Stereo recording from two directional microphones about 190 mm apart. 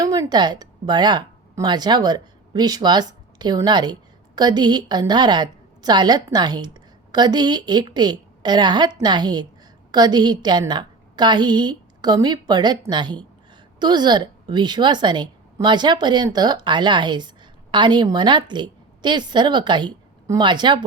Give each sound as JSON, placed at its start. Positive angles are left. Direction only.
{"t": 0.0, "sound": "a woman's voice", "side_deg": -20}